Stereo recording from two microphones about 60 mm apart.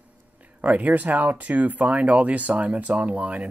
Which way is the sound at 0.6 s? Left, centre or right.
Right.